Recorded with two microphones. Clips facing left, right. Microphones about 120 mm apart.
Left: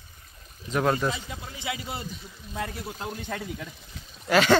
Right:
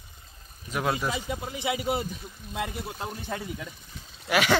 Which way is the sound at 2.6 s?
15° right (ahead or behind).